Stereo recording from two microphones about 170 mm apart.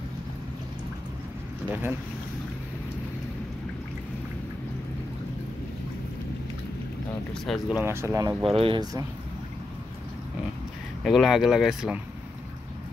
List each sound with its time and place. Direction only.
1.7 s speech: 10° right (ahead or behind)
7.4 s speech: centre (ahead or behind)
7.8 s speech: 15° right (ahead or behind)
8.5 s speech: 30° right (ahead or behind)
11.1 s speech: centre (ahead or behind)